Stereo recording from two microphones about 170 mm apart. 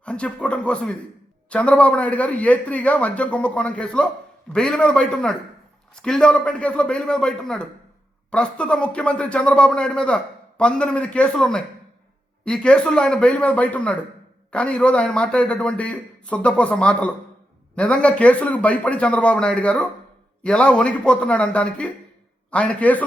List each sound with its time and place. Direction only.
0.0 s a man's voice: 5° left (ahead or behind)